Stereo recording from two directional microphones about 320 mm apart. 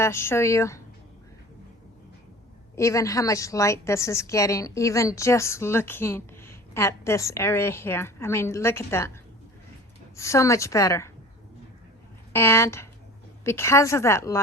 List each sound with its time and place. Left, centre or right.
0.0 s a woman's voice: centre
2.7 s a woman's voice: centre
10.2 s a woman's voice: centre
12.3 s a woman's voice: centre